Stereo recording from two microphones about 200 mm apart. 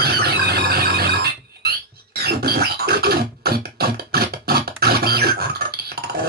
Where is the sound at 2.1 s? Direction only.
50° right (ahead or behind).